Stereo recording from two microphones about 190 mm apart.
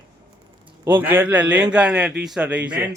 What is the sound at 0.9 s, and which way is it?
A man's voice, 10° right (ahead or behind).